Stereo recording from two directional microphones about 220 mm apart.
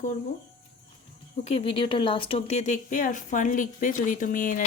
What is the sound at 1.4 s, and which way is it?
Speech, 25° left (ahead or behind).